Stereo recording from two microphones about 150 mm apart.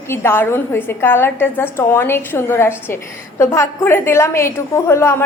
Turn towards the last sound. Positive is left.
turn(degrees=15)  # may be behind; listen again after turning